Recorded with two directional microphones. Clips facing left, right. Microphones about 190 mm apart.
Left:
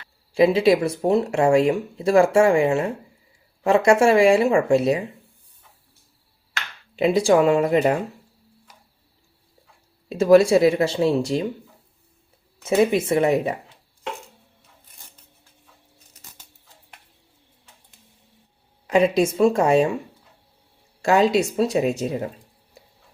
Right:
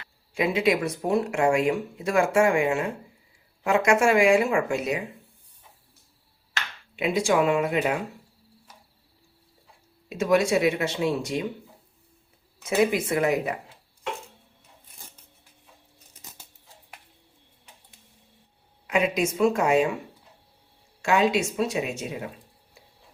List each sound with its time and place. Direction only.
0.3 s speech: 30° left (ahead or behind)
6.9 s speech: 35° left (ahead or behind)
10.1 s speech: 30° left (ahead or behind)
12.6 s speech: 25° left (ahead or behind)
18.9 s speech: 35° left (ahead or behind)
21.0 s speech: 35° left (ahead or behind)